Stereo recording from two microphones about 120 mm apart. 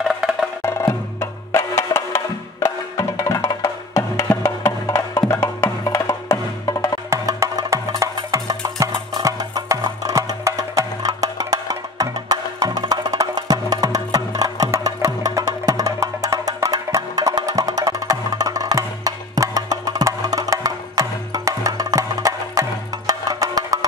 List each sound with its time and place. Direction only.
0.1 s music: 5° right (ahead or behind)
0.7 s music: 25° left (ahead or behind)
7.1 s wood block: 30° right (ahead or behind)
8.3 s music: 30° right (ahead or behind)